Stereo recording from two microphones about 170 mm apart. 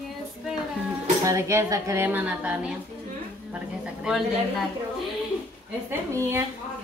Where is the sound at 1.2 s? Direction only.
15° right (ahead or behind).